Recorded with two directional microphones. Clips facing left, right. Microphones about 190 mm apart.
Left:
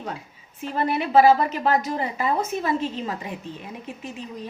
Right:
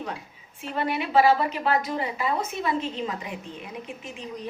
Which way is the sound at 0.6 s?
40° left (ahead or behind).